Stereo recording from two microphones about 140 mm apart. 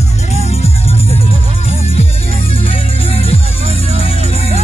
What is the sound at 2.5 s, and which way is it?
Music, 40° left (ahead or behind).